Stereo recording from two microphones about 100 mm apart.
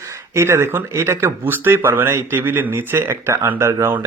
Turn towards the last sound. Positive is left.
turn(degrees=-25)  # may be behind; listen again after turning